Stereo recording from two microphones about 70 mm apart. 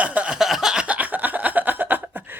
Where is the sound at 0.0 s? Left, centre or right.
Centre.